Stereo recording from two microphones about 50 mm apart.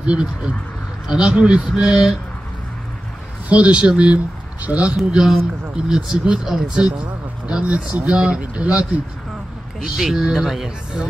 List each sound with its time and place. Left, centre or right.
0.0 s a man's voice: right
3.4 s speech: right
4.9 s a man's voice: centre; by 9.0 s right
9.8 s a man's voice: centre